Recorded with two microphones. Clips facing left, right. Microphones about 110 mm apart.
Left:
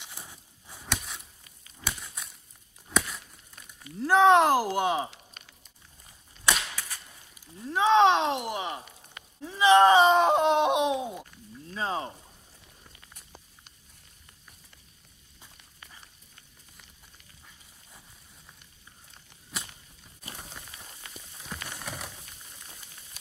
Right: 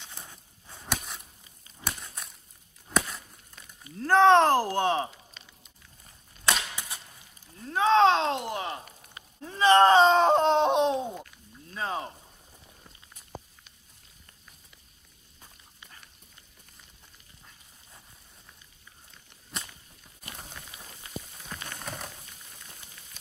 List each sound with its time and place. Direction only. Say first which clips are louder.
0.0 s a sound: even; 10° left (ahead or behind)
0.8 s a sound: right 1 dB; centre (ahead or behind)
4.0 s groan: right 1 dB; 10° left (ahead or behind)
5.4 s a sound: even; 55° left (ahead or behind)
7.5 s speech: left 1 dB; 15° left (ahead or behind)
8.5 s groan: even; 15° left (ahead or behind)
11.7 s speech: left 1 dB; 25° left (ahead or behind)
19.5 s whip: even; centre (ahead or behind)
21.6 s rain on surface: right 2 dB; 5° left (ahead or behind)